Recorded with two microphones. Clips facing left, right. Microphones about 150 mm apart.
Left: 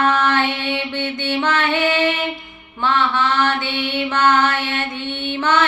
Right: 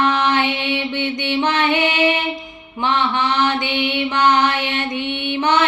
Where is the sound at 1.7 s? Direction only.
15° right (ahead or behind).